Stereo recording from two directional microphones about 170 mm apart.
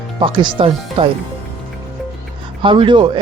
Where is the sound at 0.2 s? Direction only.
30° right (ahead or behind).